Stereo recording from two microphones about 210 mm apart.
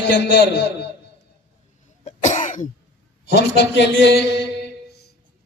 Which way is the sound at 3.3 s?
55° left (ahead or behind).